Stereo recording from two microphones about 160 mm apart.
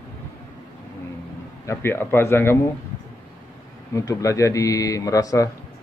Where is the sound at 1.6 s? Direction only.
15° left (ahead or behind).